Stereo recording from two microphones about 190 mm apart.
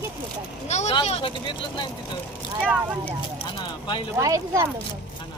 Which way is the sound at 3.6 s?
25° left (ahead or behind).